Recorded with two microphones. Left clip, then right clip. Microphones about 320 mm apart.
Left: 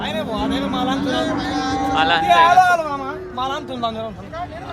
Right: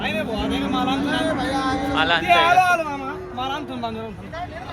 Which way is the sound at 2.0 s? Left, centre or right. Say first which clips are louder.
Left 4 dB; centre.